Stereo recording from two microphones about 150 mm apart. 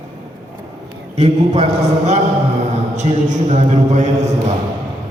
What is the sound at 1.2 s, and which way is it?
A man's voice, 45° right (ahead or behind).